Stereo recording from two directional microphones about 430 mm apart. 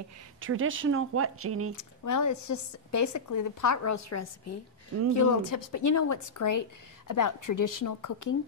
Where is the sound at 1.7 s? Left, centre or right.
Left.